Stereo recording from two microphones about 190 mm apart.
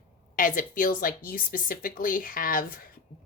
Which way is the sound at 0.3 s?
45° left (ahead or behind).